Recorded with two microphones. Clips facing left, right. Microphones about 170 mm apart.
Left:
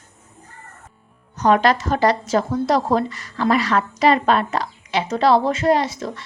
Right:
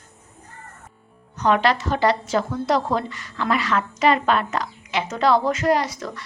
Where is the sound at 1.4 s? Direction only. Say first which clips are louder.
Left 3 dB; 40° left (ahead or behind).